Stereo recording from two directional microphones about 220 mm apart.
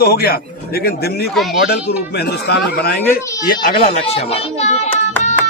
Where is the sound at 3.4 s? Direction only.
35° left (ahead or behind).